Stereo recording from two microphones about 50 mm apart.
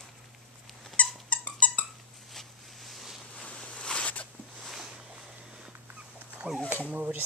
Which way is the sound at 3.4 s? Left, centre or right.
Left.